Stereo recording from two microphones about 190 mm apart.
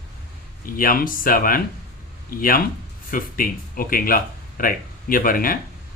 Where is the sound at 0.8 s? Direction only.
50° left (ahead or behind).